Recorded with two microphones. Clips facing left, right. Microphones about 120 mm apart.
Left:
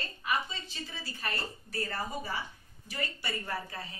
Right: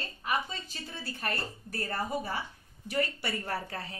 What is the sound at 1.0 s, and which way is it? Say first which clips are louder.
A woman's voice: right 3 dB; 55° right (ahead or behind).